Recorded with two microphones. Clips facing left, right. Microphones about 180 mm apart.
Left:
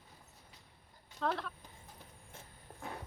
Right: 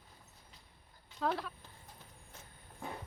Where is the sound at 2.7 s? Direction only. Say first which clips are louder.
Right 1 dB; 40° left (ahead or behind).